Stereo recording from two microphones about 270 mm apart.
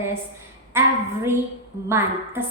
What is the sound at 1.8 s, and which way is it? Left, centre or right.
Speech, centre.